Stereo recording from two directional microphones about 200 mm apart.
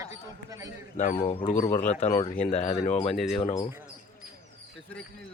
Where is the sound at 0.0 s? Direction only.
15° right (ahead or behind).